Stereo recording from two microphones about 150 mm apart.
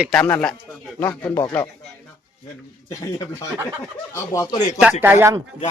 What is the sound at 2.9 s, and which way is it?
Speech, 20° left (ahead or behind).